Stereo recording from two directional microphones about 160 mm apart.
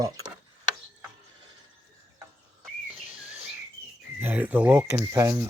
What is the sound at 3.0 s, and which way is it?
Bird, 10° right (ahead or behind).